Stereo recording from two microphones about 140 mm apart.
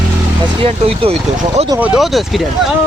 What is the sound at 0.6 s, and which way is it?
Speech, 40° right (ahead or behind).